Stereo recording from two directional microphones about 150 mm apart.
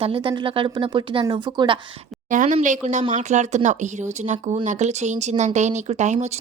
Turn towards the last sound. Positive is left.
turn(degrees=-50)  # may be behind; listen again after turning